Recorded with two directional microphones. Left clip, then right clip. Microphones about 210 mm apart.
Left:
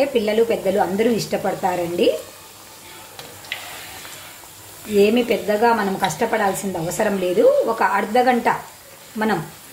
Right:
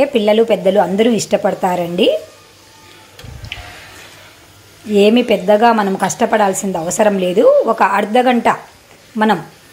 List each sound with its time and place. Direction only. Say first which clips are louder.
0.0 s a woman's voice: right 6 dB; 30° right (ahead or behind)
4.9 s a woman's voice: right 5 dB; 35° right (ahead or behind)